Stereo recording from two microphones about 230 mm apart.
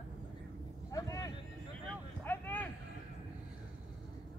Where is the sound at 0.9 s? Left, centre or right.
Centre.